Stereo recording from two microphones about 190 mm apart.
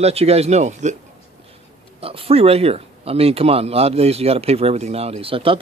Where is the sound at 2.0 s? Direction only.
30° right (ahead or behind).